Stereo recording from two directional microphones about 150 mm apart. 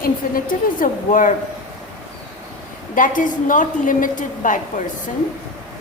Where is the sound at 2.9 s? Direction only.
60° left (ahead or behind).